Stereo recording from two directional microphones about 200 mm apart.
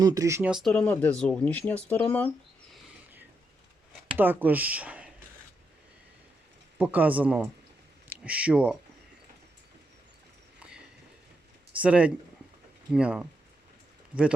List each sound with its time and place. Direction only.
0.0 s speech: 15° right (ahead or behind)
0.5 s speech: 5° left (ahead or behind)
4.2 s speech: 10° right (ahead or behind)
6.7 s speech: 10° right (ahead or behind)
10.6 s a sound: 5° right (ahead or behind)
11.8 s speech: 5° right (ahead or behind)
14.1 s speech: 25° right (ahead or behind)